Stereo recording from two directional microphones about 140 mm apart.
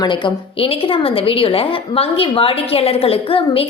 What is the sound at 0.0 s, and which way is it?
A woman's voice, 35° left (ahead or behind).